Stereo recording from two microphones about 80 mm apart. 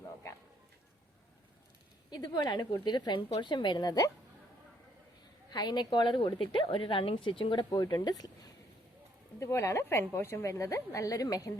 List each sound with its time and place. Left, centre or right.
2.0 s speech: left
2.8 s speech: left
5.5 s a woman's voice: left
7.7 s speech: left
9.4 s a woman's voice: left